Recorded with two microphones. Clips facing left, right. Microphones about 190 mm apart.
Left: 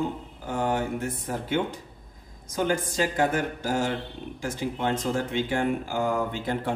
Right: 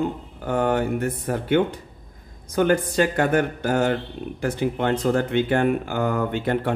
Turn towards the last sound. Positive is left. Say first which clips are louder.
# right 5 dB
turn(degrees=-65)  # may be behind; listen again after turning